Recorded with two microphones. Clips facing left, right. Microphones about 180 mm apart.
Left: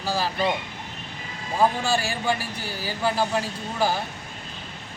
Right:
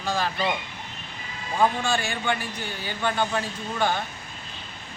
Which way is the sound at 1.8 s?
35° left (ahead or behind).